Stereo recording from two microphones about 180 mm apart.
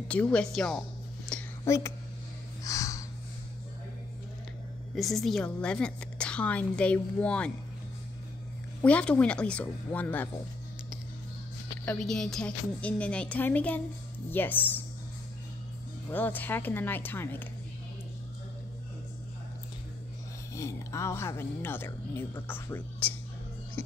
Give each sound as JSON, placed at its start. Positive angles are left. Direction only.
{"t": 0.1, "sound": "a woman's voice", "side_deg": 5}
{"t": 1.6, "sound": "speech", "side_deg": 15}
{"t": 2.6, "sound": "snort", "side_deg": 20}
{"t": 4.9, "sound": "a woman's voice", "side_deg": 0}
{"t": 8.8, "sound": "a woman's voice", "side_deg": 5}
{"t": 11.8, "sound": "a woman's voice", "side_deg": 5}
{"t": 16.1, "sound": "a woman's voice", "side_deg": 10}
{"t": 20.5, "sound": "a woman's voice", "side_deg": 15}